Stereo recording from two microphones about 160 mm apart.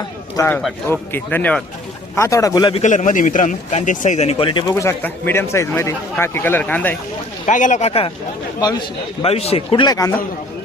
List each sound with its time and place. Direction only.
0.3 s a man's voice: 15° left (ahead or behind)
2.7 s a man's voice: 50° left (ahead or behind); by 4.6 s 35° left (ahead or behind)
4.7 s a man's voice: 15° left (ahead or behind)
7.4 s a man's voice: 50° left (ahead or behind)
9.2 s a man's voice: 40° left (ahead or behind); by 10.2 s 20° left (ahead or behind)